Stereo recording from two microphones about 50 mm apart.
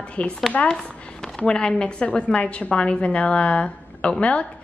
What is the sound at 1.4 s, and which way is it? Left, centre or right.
A woman's voice, centre.